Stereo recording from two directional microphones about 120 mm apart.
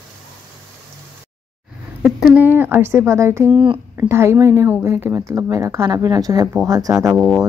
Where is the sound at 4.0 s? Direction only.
20° right (ahead or behind).